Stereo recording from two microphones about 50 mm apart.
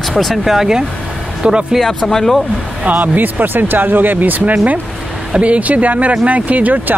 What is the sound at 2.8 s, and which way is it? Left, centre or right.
Speech, right.